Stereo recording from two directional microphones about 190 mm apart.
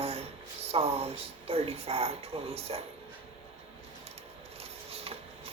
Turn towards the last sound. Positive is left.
turn(degrees=-30)  # may be behind; listen again after turning